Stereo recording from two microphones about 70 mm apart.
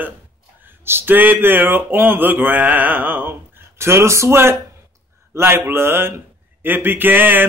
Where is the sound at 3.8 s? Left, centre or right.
Right.